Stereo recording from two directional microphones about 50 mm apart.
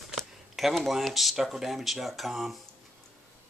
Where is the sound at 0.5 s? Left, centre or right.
Centre.